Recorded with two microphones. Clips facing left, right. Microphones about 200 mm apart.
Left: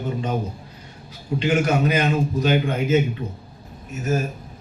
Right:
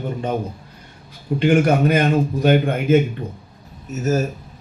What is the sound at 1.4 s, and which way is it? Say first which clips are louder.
A man's voice: right 4 dB; 55° right (ahead or behind).